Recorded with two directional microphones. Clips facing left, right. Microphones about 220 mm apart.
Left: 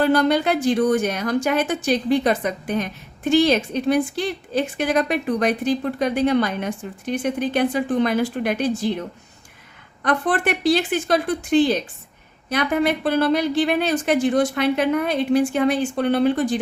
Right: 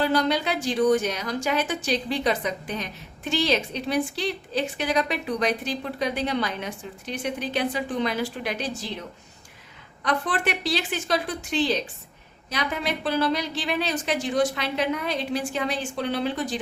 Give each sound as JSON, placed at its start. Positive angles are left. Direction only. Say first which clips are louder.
{"t": 0.0, "sound": "a woman's voice", "louder": "left 6 dB", "side_deg": 55}